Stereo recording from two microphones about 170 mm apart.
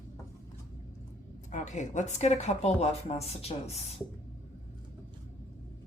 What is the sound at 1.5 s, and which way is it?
Speech, 45° left (ahead or behind).